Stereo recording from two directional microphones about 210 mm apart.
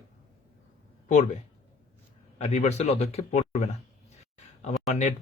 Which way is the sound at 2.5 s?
30° left (ahead or behind).